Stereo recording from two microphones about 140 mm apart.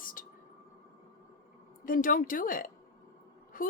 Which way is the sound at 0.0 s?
80° left.